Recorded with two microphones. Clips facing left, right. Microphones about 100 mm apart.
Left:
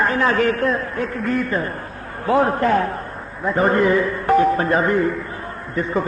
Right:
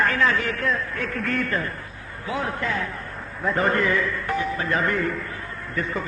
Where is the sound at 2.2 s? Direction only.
45° left (ahead or behind).